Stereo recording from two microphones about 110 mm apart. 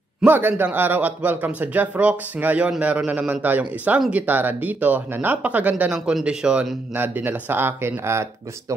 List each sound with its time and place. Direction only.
0.2 s speech: 15° right (ahead or behind)